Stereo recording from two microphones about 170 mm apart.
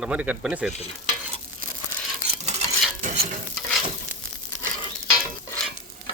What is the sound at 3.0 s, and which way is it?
Stir, 40° right (ahead or behind).